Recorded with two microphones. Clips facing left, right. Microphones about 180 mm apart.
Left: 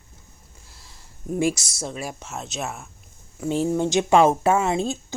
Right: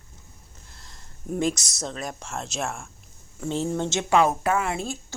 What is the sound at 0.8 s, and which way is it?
Speech, 5° left (ahead or behind).